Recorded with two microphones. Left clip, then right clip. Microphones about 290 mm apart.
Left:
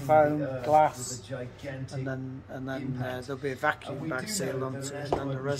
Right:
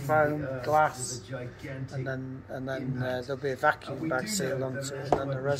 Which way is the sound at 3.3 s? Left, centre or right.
Left.